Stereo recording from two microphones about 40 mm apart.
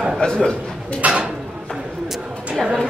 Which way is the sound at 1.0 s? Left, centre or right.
Right.